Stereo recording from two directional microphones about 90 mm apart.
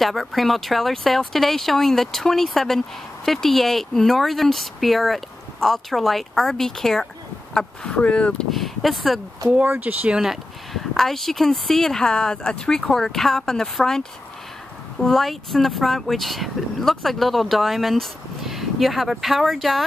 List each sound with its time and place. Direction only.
0.0 s speech: centre (ahead or behind)
8.5 s speech: centre (ahead or behind)
9.7 s speech: 20° right (ahead or behind)
10.1 s speech: 5° right (ahead or behind)